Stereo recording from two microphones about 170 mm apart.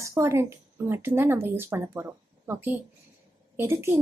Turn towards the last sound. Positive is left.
turn(degrees=-15)  # may be behind; listen again after turning